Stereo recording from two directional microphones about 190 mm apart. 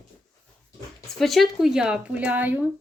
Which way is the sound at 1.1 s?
Centre (ahead or behind).